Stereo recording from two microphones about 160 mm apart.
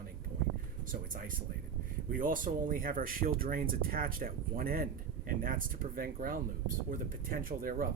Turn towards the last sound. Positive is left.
turn(degrees=-65)  # may be behind; listen again after turning